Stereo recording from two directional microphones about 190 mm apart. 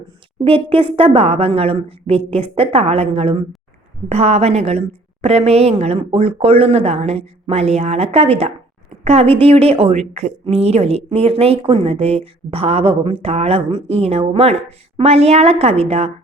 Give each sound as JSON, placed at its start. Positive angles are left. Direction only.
{"t": 0.4, "sound": "a woman's voice", "side_deg": -30}